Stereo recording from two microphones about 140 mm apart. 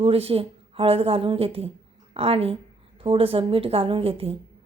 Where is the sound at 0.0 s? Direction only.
40° right (ahead or behind).